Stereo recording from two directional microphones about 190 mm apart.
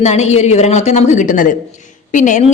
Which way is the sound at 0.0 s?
35° left (ahead or behind).